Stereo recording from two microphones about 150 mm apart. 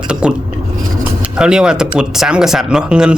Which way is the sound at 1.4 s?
5° right (ahead or behind).